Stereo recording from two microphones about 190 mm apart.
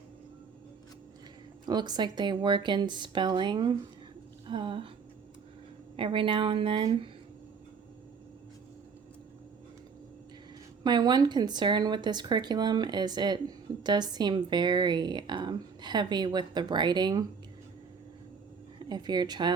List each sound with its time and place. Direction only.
1.6 s speech: 20° right (ahead or behind)
6.0 s speech: 25° right (ahead or behind)
10.8 s speech: 20° right (ahead or behind)
18.8 s a woman's voice: 20° right (ahead or behind)